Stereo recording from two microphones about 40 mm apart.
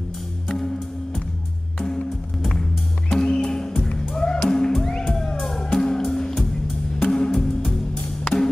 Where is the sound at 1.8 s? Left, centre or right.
Centre.